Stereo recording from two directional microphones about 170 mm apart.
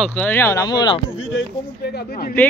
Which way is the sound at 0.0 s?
10° left (ahead or behind).